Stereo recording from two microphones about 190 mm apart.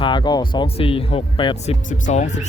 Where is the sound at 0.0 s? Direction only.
25° left (ahead or behind).